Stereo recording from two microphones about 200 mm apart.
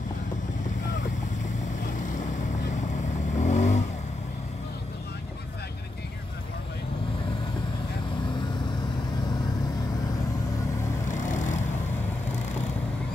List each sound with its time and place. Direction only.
3.3 s vehicle: 35° left (ahead or behind)